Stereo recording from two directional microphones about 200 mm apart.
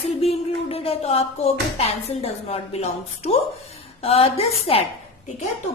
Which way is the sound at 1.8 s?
30° left (ahead or behind).